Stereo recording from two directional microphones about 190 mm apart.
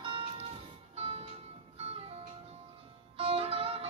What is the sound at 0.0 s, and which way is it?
Music, 25° right (ahead or behind).